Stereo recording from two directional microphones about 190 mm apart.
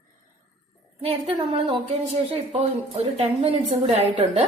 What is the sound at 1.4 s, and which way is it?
A woman's voice, 25° right (ahead or behind).